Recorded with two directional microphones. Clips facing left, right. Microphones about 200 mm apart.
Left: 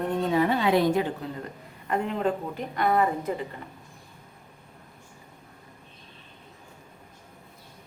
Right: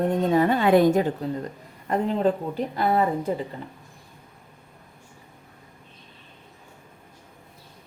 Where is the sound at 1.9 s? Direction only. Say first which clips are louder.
Right 4 dB; 35° right (ahead or behind).